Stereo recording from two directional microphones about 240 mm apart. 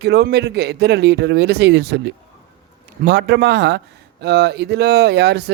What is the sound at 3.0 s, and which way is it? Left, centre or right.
Speech, right.